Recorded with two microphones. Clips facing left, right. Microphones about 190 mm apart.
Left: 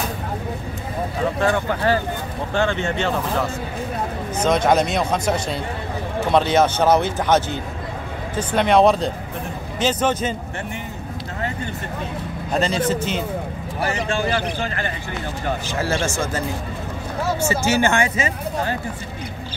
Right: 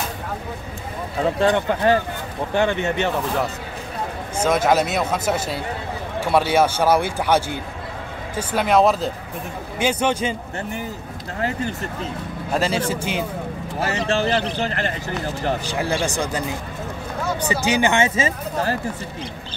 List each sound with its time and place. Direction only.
1.4 s a man's voice: 20° right (ahead or behind)
4.4 s a man's voice: 5° right (ahead or behind)
12.5 s a man's voice: 10° right (ahead or behind)
15.6 s a man's voice: 15° right (ahead or behind)
17.5 s a man's voice: 15° right (ahead or behind)